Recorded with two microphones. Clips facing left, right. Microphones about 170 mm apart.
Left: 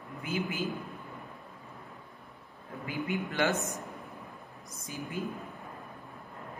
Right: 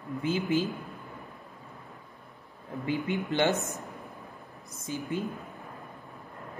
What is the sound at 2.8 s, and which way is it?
Speech, 25° right (ahead or behind).